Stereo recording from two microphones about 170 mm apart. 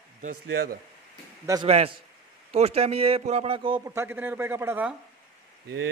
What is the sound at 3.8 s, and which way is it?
Speech, 15° right (ahead or behind).